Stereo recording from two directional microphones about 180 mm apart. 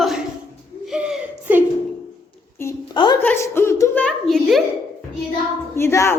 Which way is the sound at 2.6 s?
20° left (ahead or behind).